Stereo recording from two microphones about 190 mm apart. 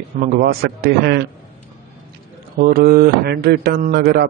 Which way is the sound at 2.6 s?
50° right (ahead or behind).